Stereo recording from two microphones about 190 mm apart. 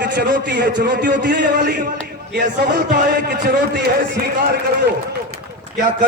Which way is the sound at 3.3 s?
60° right (ahead or behind).